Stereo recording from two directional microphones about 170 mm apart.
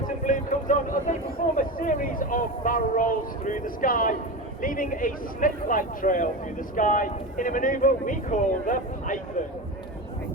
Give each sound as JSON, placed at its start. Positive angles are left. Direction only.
{"t": 0.3, "sound": "vehicle", "side_deg": 50}
{"t": 1.5, "sound": "speech", "side_deg": 55}